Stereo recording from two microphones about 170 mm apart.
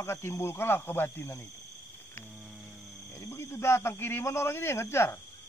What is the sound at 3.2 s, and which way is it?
A man's voice, 15° left (ahead or behind).